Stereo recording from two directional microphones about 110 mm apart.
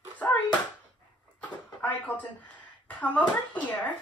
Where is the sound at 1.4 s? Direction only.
15° left (ahead or behind).